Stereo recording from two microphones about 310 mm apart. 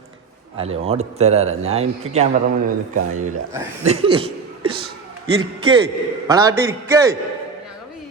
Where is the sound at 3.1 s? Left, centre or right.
Right.